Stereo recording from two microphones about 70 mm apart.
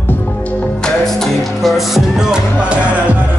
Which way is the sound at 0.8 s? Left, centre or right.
Centre.